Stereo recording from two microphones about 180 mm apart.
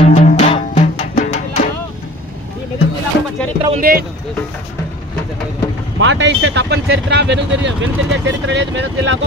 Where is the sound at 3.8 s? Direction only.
55° right (ahead or behind).